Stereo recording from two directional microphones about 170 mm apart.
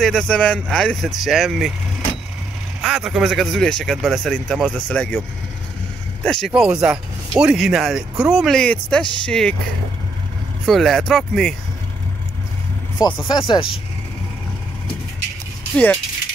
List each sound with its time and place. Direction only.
0.0 s speech: 5° left (ahead or behind)
2.8 s speech: centre (ahead or behind)
6.2 s speech: centre (ahead or behind)
10.6 s speech: centre (ahead or behind)
13.0 s speech: 25° left (ahead or behind)